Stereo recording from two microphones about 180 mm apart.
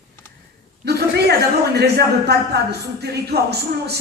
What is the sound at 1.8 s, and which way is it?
Speech, 65° right (ahead or behind).